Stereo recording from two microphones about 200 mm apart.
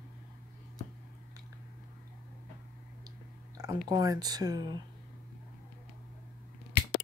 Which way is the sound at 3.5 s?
20° right (ahead or behind).